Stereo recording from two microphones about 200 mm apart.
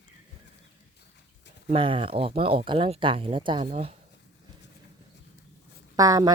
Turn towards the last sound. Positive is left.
turn(degrees=-15)  # may be behind; listen again after turning